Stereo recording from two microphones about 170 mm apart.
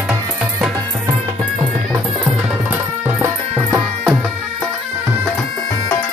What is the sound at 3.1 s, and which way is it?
Music, 15° right (ahead or behind).